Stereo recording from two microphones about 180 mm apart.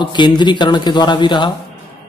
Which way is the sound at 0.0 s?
25° left (ahead or behind).